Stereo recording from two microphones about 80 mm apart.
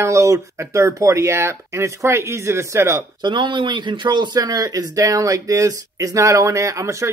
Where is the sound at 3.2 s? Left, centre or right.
Right.